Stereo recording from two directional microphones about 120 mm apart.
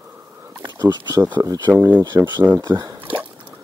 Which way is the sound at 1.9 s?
15° right (ahead or behind).